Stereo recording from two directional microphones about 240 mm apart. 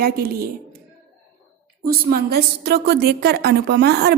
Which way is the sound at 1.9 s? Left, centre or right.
Right.